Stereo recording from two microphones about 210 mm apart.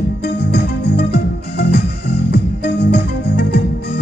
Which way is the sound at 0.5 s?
50° left (ahead or behind).